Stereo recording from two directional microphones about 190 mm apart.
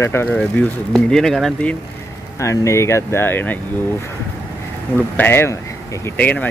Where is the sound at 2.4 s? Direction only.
15° left (ahead or behind).